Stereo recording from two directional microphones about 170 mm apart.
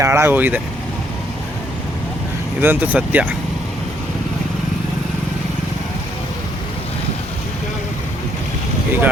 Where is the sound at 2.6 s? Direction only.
10° right (ahead or behind).